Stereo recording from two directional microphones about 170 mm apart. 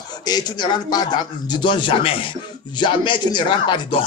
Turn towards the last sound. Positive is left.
turn(degrees=30)  # may be behind; listen again after turning